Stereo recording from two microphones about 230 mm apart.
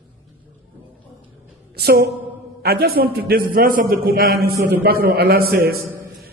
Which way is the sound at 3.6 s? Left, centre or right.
Right.